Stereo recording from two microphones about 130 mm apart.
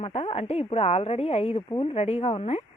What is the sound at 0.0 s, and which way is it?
A woman's voice, 50° left (ahead or behind).